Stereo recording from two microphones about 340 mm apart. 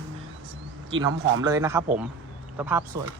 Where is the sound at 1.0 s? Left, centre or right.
Centre.